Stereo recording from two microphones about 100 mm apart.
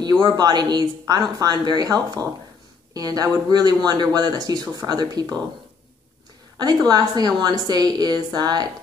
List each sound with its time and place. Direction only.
0.0 s speech: 45° right (ahead or behind)
6.6 s speech: 40° right (ahead or behind)